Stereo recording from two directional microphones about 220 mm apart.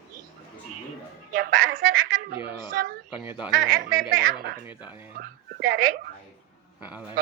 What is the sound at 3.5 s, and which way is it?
Speech, 40° right (ahead or behind).